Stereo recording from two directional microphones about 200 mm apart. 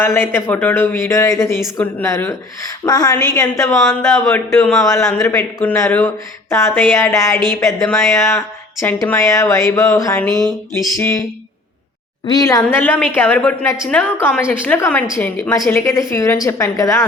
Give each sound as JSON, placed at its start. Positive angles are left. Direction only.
{"t": 0.0, "sound": "a woman's voice", "side_deg": 10}
{"t": 12.2, "sound": "speech", "side_deg": 20}